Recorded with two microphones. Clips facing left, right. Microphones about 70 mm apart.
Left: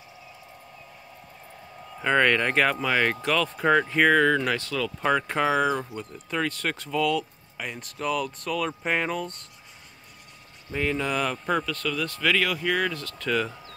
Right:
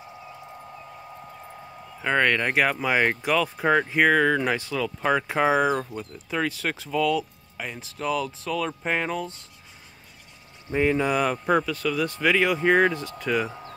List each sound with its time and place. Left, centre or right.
1.9 s speech: centre
10.7 s speech: centre